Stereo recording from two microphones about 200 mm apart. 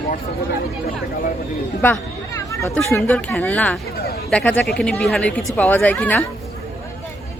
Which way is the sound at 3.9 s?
50° left (ahead or behind).